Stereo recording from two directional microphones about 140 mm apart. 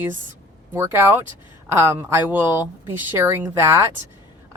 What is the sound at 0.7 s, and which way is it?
A woman's voice, 15° right (ahead or behind).